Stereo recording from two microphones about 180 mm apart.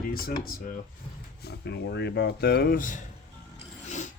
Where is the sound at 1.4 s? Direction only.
70° left (ahead or behind); by 3.1 s 45° left (ahead or behind).